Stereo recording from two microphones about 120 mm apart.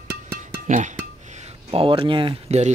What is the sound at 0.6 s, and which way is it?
Speech, 90° right.